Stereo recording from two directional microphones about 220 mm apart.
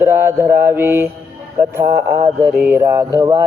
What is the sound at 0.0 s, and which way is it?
Speech, 10° right (ahead or behind).